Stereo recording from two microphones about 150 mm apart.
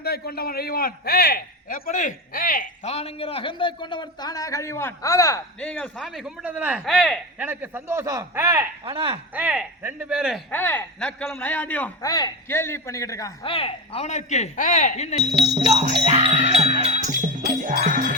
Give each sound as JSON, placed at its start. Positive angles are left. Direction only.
{"t": 0.0, "sound": "a man's voice", "side_deg": 90}
{"t": 2.8, "sound": "a man's voice", "side_deg": 45}
{"t": 5.5, "sound": "a man's voice", "side_deg": 5}
{"t": 6.8, "sound": "speech", "side_deg": 0}
{"t": 7.3, "sound": "a man's voice", "side_deg": -10}
{"t": 8.8, "sound": "speech", "side_deg": -35}
{"t": 9.3, "sound": "a man's voice", "side_deg": -10}
{"t": 10.5, "sound": "speech", "side_deg": 15}
{"t": 12.0, "sound": "a man's voice", "side_deg": 25}
{"t": 13.4, "sound": "speech", "side_deg": 40}
{"t": 15.2, "sound": "music", "side_deg": -45}